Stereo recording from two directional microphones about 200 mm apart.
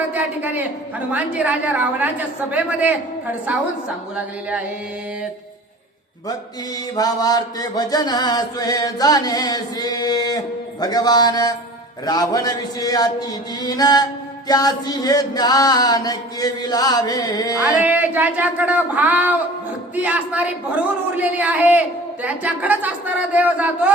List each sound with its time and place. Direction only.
0.1 s a man's voice: 10° right (ahead or behind)
6.9 s chant: 20° left (ahead or behind)
17.7 s a man's voice: 10° right (ahead or behind)